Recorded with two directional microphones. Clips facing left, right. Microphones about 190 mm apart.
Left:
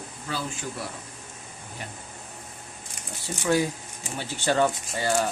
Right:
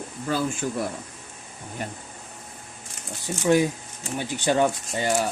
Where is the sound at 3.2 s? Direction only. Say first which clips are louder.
Right 4 dB; 15° right (ahead or behind).